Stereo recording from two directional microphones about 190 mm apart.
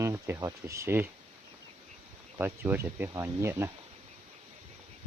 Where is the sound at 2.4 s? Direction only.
10° right (ahead or behind).